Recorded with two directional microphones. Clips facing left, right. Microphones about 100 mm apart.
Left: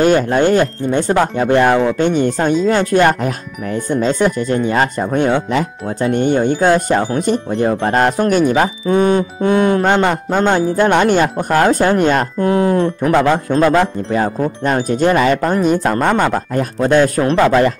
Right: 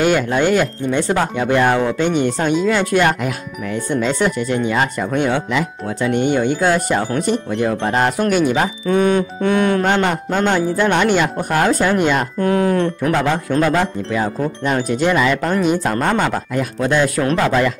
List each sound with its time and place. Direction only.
0.0 s speech: 40° left (ahead or behind)
8.5 s speech: 30° left (ahead or behind)
12.4 s speech: 30° left (ahead or behind)
13.7 s speech: 40° left (ahead or behind)
15.4 s speech: 30° left (ahead or behind)
17.2 s speech: 30° left (ahead or behind)
17.5 s speech: 40° left (ahead or behind)